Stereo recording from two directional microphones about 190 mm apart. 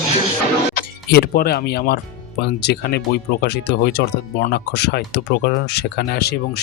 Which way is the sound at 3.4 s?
60° left (ahead or behind).